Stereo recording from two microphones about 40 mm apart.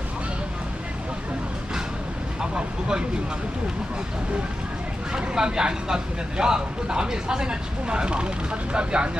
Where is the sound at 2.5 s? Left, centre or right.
Centre.